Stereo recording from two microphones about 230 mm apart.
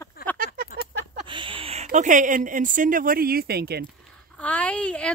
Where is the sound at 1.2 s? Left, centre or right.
Right.